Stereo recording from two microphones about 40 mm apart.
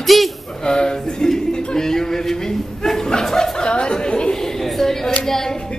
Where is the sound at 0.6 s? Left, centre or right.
Left.